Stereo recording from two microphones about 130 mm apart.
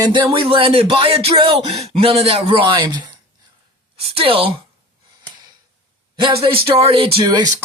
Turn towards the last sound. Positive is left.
turn(degrees=-35)  # may be behind; listen again after turning